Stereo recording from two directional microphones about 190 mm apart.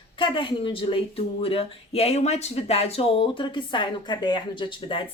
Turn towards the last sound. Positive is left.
turn(degrees=25)  # may be behind; listen again after turning